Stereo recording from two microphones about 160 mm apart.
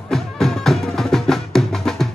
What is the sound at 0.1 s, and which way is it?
Music, centre (ahead or behind).